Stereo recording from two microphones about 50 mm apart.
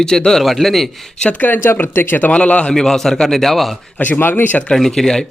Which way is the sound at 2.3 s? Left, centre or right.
Left.